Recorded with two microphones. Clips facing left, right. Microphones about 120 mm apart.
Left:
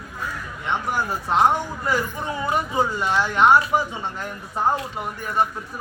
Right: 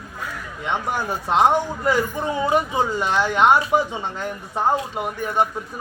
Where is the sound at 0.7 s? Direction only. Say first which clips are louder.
Even; 20° right (ahead or behind).